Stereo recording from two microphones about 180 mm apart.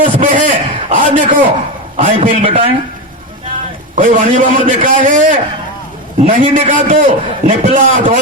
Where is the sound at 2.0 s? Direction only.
30° right (ahead or behind).